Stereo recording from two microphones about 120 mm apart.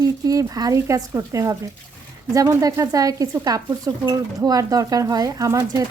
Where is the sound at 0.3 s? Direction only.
30° right (ahead or behind).